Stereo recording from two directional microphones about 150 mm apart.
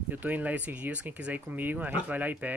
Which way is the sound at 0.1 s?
10° right (ahead or behind).